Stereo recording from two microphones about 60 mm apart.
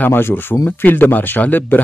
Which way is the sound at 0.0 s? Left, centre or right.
Left.